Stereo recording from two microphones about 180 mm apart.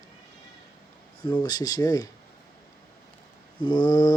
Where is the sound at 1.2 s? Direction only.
25° left (ahead or behind).